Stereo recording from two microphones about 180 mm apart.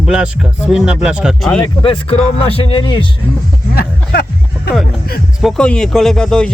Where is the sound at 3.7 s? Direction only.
55° left (ahead or behind).